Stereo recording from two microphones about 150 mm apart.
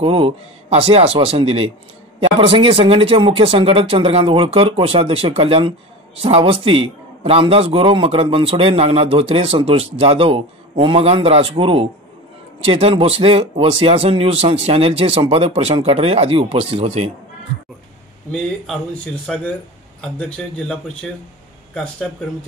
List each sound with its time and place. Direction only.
0.0 s a man's voice: 40° right (ahead or behind)
20.0 s speech: 5° left (ahead or behind)